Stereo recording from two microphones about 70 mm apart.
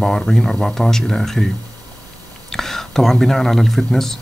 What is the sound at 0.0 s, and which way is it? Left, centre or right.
Speech, centre.